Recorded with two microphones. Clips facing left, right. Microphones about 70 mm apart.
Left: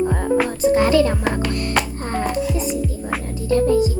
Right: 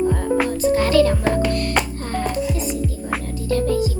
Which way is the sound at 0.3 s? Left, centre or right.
Centre.